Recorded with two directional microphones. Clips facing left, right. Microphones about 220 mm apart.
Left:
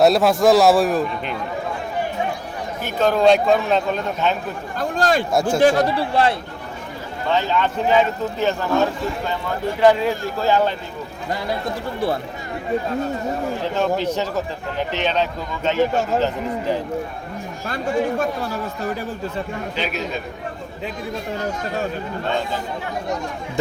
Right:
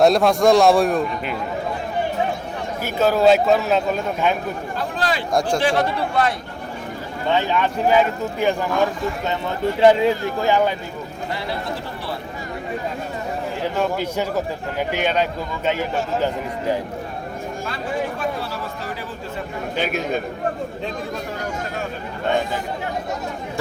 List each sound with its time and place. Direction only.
0.0 s a man's voice: 5° left (ahead or behind)
2.8 s a man's voice: 5° right (ahead or behind)
4.8 s a sound: 45° left (ahead or behind)
5.3 s a man's voice: 5° left (ahead or behind)
5.5 s speech: 40° left (ahead or behind)
7.3 s a man's voice: 10° right (ahead or behind)
13.7 s a man's voice: 10° right (ahead or behind)
19.7 s a man's voice: 50° right (ahead or behind)